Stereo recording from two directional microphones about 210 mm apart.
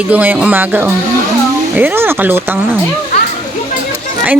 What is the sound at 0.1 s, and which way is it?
Speech, 5° right (ahead or behind).